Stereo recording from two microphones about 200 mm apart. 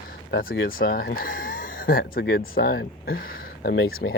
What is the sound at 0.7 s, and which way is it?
Speech, 45° left (ahead or behind).